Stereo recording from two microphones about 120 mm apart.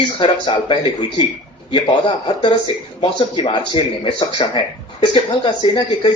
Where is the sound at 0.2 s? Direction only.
45° left (ahead or behind).